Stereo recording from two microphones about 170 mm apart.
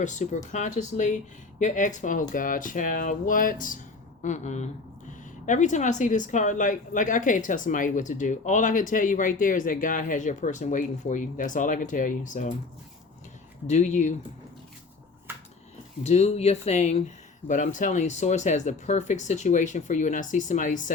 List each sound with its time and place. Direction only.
0.0 s a woman's voice: 45° left (ahead or behind)
13.7 s a woman's voice: 40° left (ahead or behind)
16.0 s a woman's voice: 40° left (ahead or behind)